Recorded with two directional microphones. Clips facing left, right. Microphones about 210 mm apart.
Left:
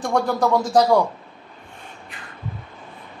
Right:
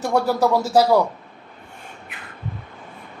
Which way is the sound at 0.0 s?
10° right (ahead or behind).